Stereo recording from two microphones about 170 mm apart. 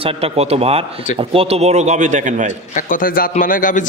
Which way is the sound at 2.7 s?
55° left (ahead or behind).